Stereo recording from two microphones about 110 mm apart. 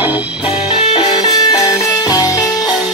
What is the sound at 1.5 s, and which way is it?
Music, 35° left (ahead or behind).